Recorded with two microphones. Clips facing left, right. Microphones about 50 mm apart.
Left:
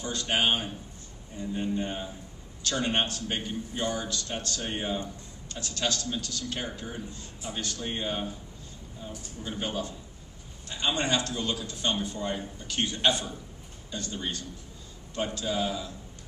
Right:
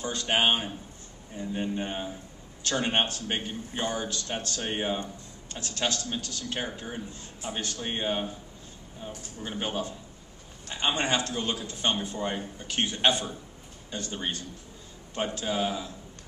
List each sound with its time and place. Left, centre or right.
0.0 s a man's voice: right
9.5 s a man's voice: right